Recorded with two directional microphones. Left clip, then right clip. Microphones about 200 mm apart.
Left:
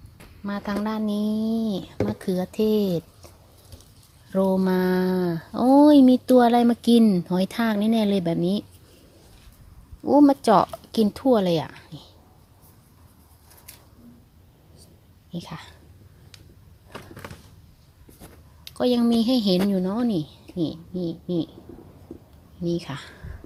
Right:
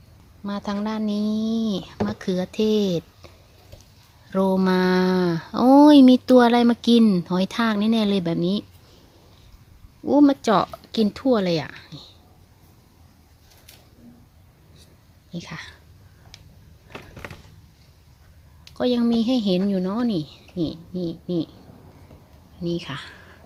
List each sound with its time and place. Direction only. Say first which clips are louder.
0.4 s speech: even; centre (ahead or behind)
4.3 s speech: right 1 dB; 5° right (ahead or behind)
10.0 s speech: even; 5° left (ahead or behind)
15.3 s speech: right 2 dB; centre (ahead or behind)
16.3 s a sound: right 2 dB; 5° right (ahead or behind)
18.7 s speech: even; 5° left (ahead or behind)
22.6 s speech: even; 10° left (ahead or behind)